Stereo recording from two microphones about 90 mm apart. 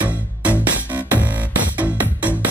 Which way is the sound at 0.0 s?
15° right (ahead or behind).